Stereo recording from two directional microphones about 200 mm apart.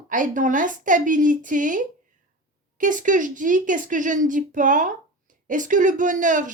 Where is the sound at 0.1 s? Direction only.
40° right (ahead or behind).